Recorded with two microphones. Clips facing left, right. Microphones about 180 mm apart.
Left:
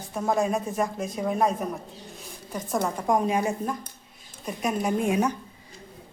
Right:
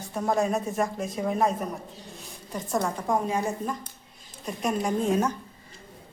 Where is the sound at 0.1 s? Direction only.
Centre (ahead or behind).